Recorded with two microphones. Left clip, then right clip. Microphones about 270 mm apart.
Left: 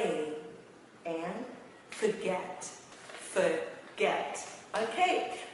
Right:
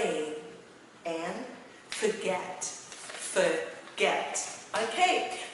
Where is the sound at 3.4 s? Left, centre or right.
Centre.